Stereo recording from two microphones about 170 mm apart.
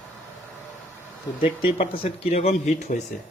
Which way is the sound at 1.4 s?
35° left (ahead or behind).